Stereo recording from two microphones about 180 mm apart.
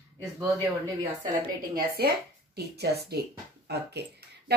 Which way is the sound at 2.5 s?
65° right (ahead or behind).